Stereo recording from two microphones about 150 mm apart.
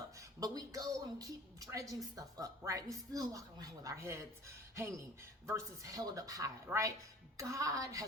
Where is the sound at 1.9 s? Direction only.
25° right (ahead or behind).